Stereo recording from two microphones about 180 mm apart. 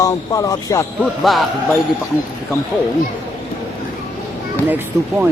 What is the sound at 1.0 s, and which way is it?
Speech, centre (ahead or behind).